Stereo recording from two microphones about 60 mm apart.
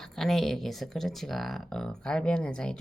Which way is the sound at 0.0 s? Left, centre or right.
Centre.